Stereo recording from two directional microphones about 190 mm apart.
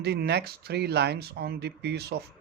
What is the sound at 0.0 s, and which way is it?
Speech, 60° right (ahead or behind).